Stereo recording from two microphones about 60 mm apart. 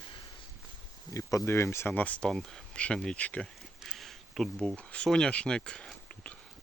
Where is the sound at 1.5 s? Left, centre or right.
Left.